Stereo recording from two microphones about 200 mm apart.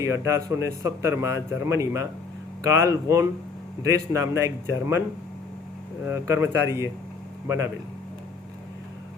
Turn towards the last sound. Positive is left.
turn(degrees=-15)  # may be behind; listen again after turning